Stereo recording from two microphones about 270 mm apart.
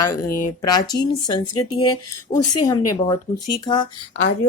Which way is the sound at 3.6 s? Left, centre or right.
Centre.